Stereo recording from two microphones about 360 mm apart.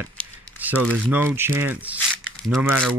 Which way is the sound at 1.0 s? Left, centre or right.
Centre.